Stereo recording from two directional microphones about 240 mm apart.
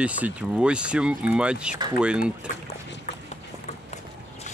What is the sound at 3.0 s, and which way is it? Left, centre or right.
Run, left.